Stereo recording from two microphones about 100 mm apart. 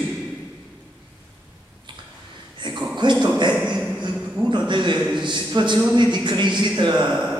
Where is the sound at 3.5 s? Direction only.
10° right (ahead or behind).